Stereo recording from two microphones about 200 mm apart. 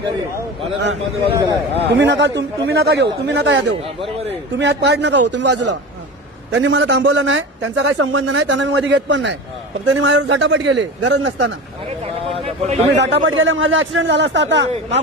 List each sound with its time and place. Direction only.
0.8 s a man's voice: 60° right (ahead or behind)
12.3 s a sound: 30° right (ahead or behind)
13.0 s speech: 70° right (ahead or behind)